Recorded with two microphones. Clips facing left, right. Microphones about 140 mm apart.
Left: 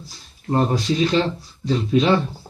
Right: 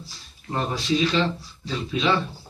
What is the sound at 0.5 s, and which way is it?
Speech, 45° left (ahead or behind).